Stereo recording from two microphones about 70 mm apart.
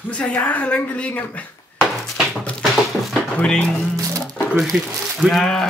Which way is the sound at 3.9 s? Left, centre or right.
Right.